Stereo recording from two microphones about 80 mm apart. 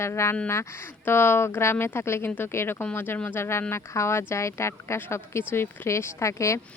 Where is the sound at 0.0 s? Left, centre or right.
Left.